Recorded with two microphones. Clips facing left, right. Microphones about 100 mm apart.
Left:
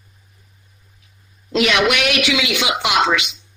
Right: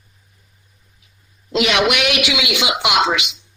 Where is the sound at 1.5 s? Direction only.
20° right (ahead or behind).